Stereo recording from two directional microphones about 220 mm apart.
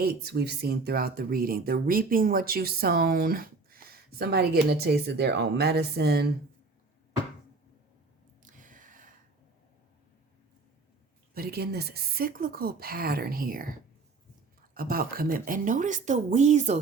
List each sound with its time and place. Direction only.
0.0 s speech: 45° right (ahead or behind)
8.4 s squish: 35° right (ahead or behind)
11.3 s speech: 45° right (ahead or behind)
14.8 s speech: 40° right (ahead or behind)